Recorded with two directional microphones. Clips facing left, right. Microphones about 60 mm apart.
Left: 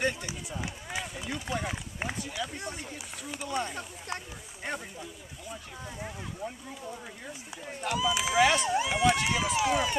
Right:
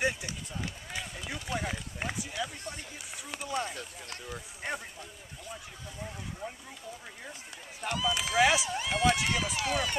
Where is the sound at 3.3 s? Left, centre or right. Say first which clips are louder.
Left 1 dB; centre.